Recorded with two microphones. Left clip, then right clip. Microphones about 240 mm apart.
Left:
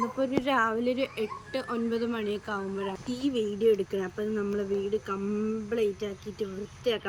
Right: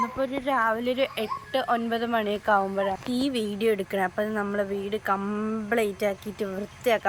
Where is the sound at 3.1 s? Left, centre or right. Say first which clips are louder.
Right 2 dB; right.